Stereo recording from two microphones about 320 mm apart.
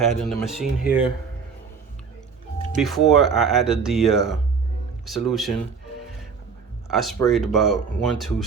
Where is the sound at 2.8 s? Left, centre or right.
Centre.